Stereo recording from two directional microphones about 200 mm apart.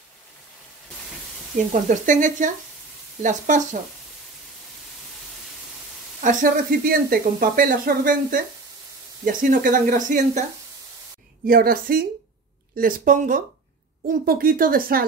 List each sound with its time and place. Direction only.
1.7 s speech: 40° right (ahead or behind)
6.2 s speech: 45° right (ahead or behind)
11.4 s speech: 45° right (ahead or behind)